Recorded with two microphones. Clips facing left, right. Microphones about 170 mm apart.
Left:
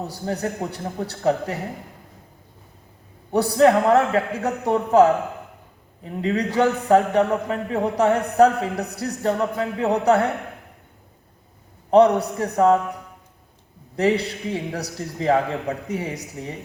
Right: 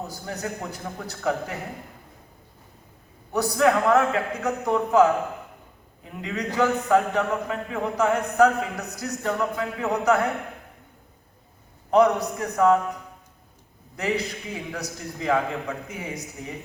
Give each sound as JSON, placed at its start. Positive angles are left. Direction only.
{"t": 0.0, "sound": "a man's voice", "side_deg": 35}
{"t": 3.3, "sound": "a man's voice", "side_deg": 30}
{"t": 11.9, "sound": "a man's voice", "side_deg": 30}